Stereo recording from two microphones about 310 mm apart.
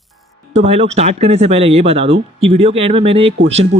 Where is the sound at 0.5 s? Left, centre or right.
Right.